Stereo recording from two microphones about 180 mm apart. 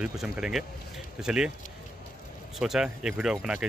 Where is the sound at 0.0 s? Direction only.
5° right (ahead or behind).